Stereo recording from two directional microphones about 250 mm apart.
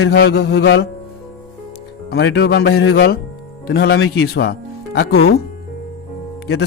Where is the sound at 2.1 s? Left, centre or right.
Left.